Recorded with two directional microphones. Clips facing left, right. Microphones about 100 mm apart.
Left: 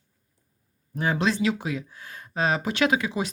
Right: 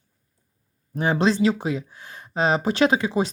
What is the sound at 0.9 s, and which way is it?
Speech, 30° right (ahead or behind).